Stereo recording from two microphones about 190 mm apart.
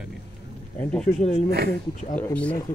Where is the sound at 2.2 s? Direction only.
5° left (ahead or behind).